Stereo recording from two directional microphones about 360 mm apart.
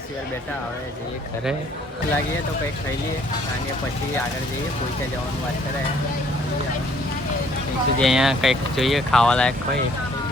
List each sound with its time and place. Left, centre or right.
7.9 s speech: centre